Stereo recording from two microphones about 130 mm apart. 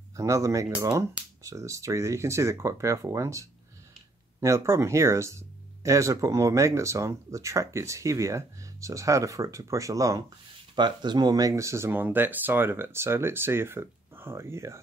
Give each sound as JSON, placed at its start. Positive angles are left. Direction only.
{"t": 0.1, "sound": "speech", "side_deg": -25}